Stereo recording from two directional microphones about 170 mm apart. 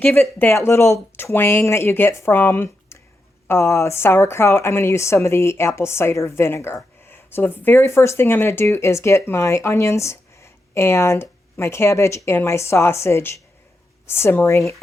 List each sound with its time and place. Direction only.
0.0 s speech: 10° left (ahead or behind)